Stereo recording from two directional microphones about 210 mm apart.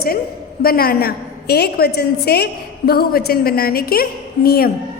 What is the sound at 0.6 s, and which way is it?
A woman's voice, 45° left (ahead or behind).